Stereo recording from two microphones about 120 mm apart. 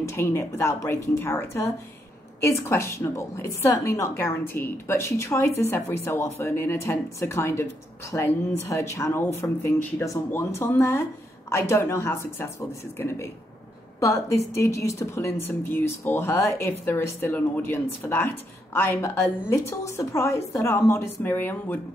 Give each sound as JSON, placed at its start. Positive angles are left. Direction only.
{"t": 0.0, "sound": "a woman's voice", "side_deg": 20}